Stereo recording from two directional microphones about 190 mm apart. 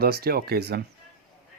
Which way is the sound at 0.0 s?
55° right (ahead or behind).